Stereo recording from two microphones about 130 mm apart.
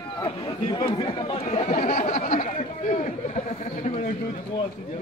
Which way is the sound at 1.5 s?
70° left (ahead or behind).